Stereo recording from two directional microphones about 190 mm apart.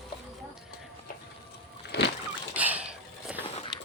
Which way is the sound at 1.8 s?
60° left (ahead or behind).